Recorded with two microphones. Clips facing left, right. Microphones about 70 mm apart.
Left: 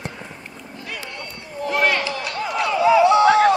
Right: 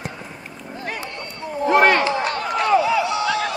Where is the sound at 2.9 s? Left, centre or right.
Left.